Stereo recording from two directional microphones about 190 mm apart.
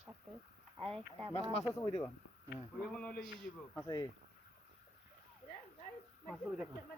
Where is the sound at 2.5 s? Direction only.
5° left (ahead or behind).